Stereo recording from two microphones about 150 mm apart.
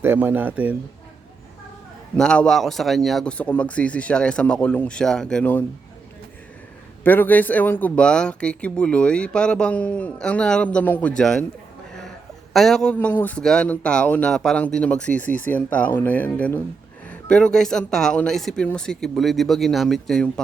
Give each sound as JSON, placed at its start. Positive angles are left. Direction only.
{"t": 0.0, "sound": "speech", "side_deg": -15}
{"t": 2.1, "sound": "speech", "side_deg": 5}
{"t": 7.0, "sound": "speech", "side_deg": 10}
{"t": 12.5, "sound": "speech", "side_deg": 0}